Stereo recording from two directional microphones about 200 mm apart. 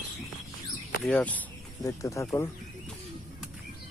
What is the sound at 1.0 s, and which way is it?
Speech, 5° left (ahead or behind).